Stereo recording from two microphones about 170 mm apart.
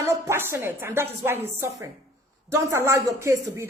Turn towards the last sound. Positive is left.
turn(degrees=-15)  # may be behind; listen again after turning